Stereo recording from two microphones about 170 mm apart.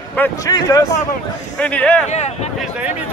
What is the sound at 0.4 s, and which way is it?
Speech, 20° left (ahead or behind).